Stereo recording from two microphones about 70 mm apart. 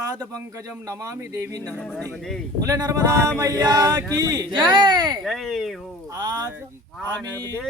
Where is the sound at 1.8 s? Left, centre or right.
Centre.